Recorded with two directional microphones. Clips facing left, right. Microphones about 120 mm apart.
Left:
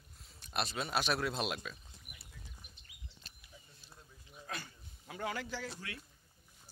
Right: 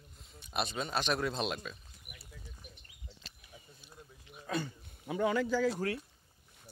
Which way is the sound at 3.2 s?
90° right.